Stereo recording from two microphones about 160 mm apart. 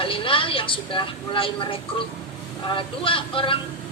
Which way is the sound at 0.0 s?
35° left (ahead or behind).